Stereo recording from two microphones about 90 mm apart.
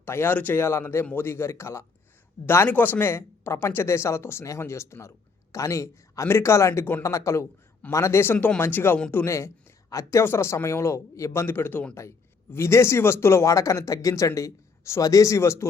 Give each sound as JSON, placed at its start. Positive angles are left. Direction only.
{"t": 0.0, "sound": "a man's voice", "side_deg": 25}